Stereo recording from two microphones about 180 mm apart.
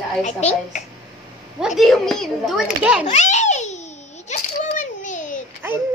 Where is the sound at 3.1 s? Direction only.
40° left (ahead or behind).